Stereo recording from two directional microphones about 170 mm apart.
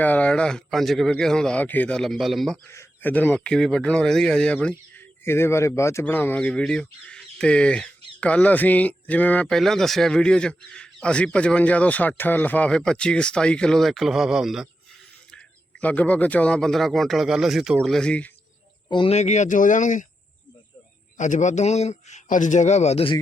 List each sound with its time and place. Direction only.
0.0 s speech: 10° left (ahead or behind)
2.6 s speech: 15° left (ahead or behind)
18.9 s speech: 25° left (ahead or behind)
19.1 s speech: 40° left (ahead or behind)
21.2 s speech: 45° left (ahead or behind)